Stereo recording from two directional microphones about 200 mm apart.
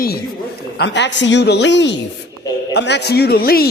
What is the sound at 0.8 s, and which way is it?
A man's voice, 60° left (ahead or behind).